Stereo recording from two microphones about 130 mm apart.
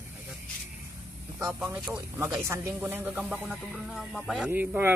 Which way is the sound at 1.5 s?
20° right (ahead or behind).